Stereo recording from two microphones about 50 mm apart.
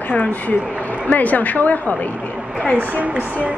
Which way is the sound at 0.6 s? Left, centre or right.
Right.